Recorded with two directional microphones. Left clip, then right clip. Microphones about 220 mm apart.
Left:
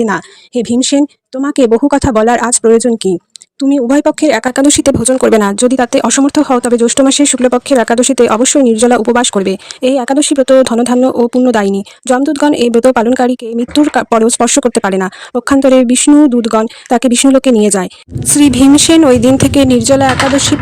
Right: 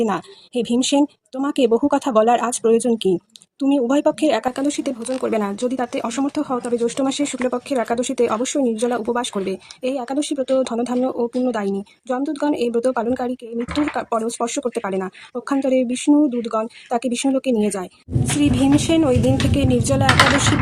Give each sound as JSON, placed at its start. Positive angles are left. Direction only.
{"t": 0.0, "sound": "speech", "side_deg": 35}